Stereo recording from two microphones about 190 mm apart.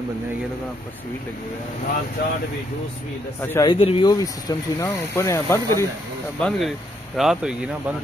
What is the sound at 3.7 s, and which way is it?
Speech, 30° left (ahead or behind).